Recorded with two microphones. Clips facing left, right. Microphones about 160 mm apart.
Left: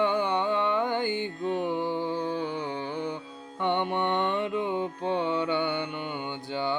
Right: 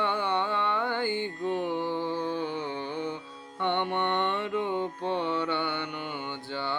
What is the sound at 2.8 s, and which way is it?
Music, 45° left (ahead or behind).